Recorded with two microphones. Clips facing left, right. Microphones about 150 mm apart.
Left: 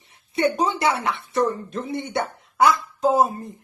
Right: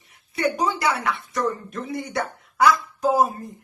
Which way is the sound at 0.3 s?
25° left (ahead or behind).